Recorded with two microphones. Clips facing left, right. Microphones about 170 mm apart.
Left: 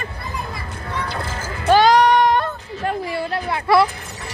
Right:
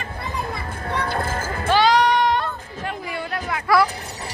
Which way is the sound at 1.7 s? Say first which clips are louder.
Left 4 dB; 45° left (ahead or behind).